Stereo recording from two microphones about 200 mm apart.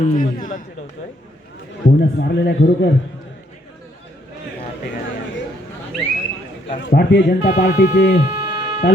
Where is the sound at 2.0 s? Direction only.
55° left (ahead or behind).